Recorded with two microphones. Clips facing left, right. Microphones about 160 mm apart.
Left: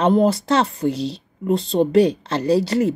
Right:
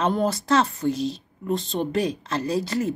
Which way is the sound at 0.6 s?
30° left (ahead or behind).